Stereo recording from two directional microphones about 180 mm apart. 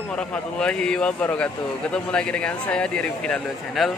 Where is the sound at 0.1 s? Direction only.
5° left (ahead or behind).